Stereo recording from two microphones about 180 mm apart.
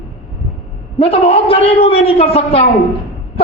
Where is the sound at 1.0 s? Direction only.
30° left (ahead or behind).